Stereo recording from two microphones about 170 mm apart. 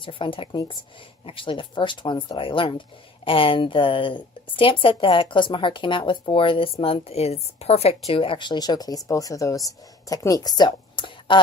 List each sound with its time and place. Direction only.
0.0 s speech: 30° left (ahead or behind)